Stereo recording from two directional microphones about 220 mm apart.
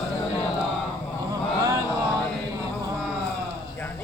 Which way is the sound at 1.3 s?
15° right (ahead or behind).